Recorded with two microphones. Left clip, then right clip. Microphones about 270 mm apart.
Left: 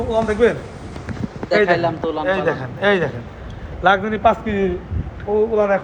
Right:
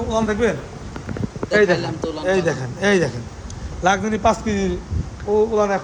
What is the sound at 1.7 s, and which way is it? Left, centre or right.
Speech, centre.